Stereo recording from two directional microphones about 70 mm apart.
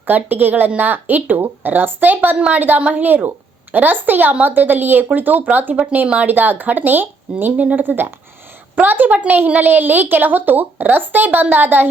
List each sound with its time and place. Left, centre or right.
0.0 s a woman's voice: right